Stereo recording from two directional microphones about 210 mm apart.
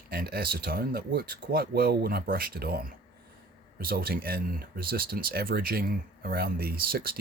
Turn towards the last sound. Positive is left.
turn(degrees=-45)  # may be behind; listen again after turning